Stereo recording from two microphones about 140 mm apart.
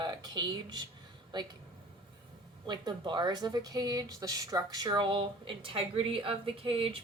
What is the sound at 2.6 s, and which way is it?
Speech, 35° right (ahead or behind).